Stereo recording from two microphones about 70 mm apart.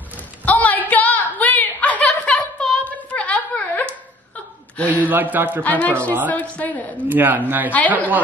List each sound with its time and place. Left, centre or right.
0.5 s chuckle: left
5.0 s speech: right
5.6 s a man's voice: left
7.1 s speech: right